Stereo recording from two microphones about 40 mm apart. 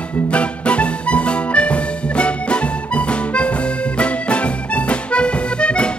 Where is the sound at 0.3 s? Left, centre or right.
Left.